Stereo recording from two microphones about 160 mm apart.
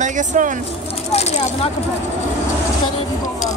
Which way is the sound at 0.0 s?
50° right (ahead or behind).